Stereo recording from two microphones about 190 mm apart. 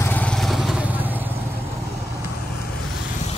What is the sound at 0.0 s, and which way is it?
Vehicle, 10° left (ahead or behind).